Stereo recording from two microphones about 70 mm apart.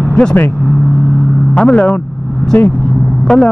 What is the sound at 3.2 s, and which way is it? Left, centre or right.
Speech, centre.